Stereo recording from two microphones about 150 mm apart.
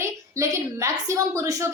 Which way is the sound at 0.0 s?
20° right (ahead or behind).